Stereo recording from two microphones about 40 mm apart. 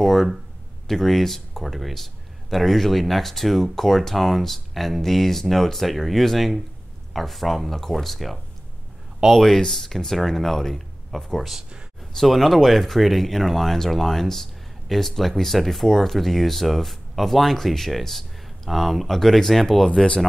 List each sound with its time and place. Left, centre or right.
0.0 s speech: centre
9.2 s speech: centre
9.6 s speech: centre
19.9 s speech: left